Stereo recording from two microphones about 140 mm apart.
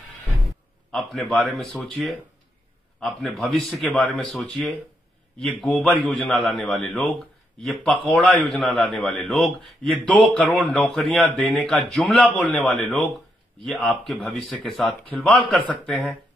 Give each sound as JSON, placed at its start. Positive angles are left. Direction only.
{"t": 0.9, "sound": "a man's voice", "side_deg": 0}
{"t": 3.0, "sound": "a man's voice", "side_deg": 0}
{"t": 15.3, "sound": "a man's voice", "side_deg": 35}
{"t": 15.9, "sound": "a man's voice", "side_deg": 0}